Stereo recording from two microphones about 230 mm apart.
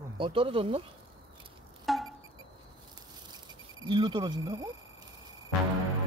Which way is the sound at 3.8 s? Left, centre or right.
Centre.